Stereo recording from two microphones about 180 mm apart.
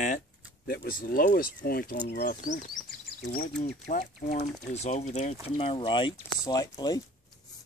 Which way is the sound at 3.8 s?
45° left (ahead or behind).